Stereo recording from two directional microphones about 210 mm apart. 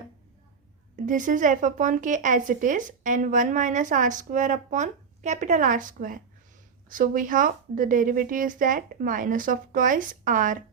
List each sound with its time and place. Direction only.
0.9 s speech: 35° right (ahead or behind)